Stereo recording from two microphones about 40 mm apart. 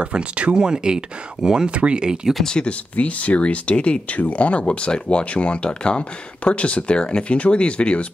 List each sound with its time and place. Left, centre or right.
0.0 s speech: right
1.7 s speech: right
2.4 s speech: left
3.0 s speech: left